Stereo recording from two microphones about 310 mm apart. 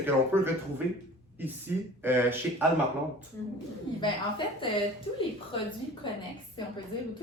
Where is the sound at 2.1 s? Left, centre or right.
Centre.